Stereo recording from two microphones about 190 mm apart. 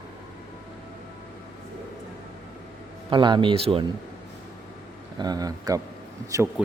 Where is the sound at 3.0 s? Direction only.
25° right (ahead or behind).